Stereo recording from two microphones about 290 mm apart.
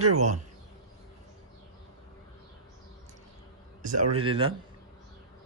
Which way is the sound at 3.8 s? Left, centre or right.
Right.